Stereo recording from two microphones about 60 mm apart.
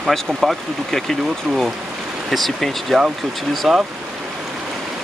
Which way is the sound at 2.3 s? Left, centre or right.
Centre.